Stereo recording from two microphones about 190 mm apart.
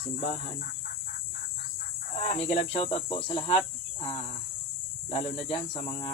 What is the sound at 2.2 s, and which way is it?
Speech, 35° left (ahead or behind).